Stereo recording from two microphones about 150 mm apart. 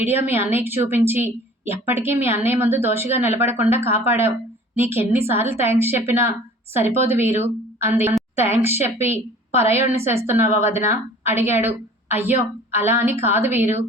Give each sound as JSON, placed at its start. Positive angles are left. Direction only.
{"t": 0.0, "sound": "a woman's voice", "side_deg": -15}